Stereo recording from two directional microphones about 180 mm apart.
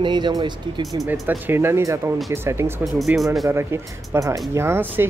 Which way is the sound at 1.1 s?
5° right (ahead or behind).